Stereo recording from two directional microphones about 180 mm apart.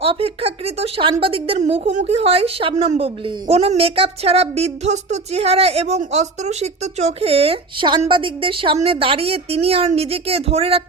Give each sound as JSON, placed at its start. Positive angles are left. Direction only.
{"t": 0.0, "sound": "a woman's voice", "side_deg": -30}